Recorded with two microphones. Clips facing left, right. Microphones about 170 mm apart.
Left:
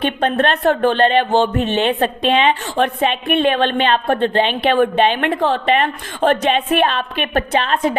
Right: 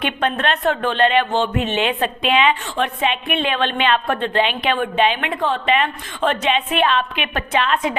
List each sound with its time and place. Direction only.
0.0 s a woman's voice: 35° left (ahead or behind)